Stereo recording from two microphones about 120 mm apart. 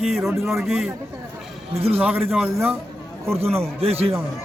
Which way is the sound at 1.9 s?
10° right (ahead or behind).